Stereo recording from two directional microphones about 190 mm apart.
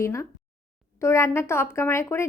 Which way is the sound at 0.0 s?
15° left (ahead or behind).